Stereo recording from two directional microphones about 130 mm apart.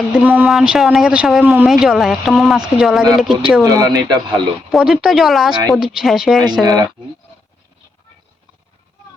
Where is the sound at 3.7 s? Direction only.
30° right (ahead or behind).